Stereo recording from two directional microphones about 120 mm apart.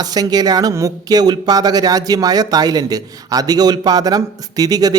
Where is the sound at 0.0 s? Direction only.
35° right (ahead or behind).